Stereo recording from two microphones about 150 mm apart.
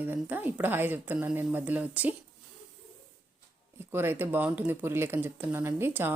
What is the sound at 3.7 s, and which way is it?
Speech, 15° right (ahead or behind).